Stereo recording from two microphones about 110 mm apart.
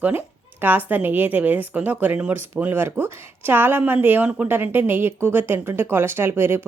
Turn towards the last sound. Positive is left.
turn(degrees=-20)  # may be behind; listen again after turning